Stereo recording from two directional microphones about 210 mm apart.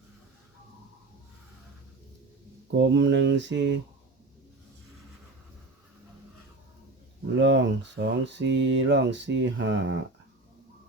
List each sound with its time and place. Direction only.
2.7 s speech: 55° right (ahead or behind)
7.3 s speech: 60° right (ahead or behind)